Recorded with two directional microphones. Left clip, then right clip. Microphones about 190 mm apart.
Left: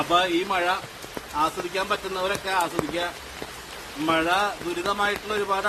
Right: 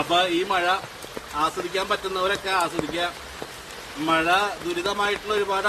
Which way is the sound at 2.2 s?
15° right (ahead or behind).